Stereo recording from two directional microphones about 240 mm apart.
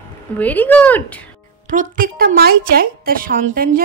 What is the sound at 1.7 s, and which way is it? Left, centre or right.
A woman's voice, right.